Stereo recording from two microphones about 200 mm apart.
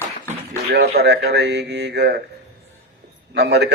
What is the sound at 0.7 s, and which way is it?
Speech, 55° right (ahead or behind).